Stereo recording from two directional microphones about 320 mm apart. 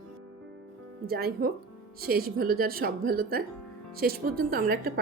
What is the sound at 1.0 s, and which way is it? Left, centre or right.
A woman's voice, right.